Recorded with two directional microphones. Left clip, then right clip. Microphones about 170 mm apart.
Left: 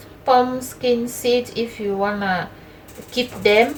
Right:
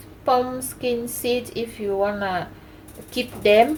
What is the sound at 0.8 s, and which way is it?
Speech, 45° right (ahead or behind).